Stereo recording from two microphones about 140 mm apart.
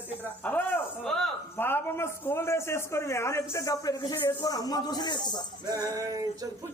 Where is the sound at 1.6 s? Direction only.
15° left (ahead or behind); by 5.3 s 30° left (ahead or behind).